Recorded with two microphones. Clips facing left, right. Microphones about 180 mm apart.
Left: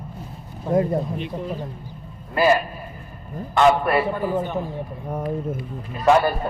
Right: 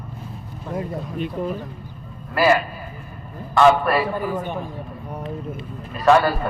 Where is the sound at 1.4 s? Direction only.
50° right (ahead or behind).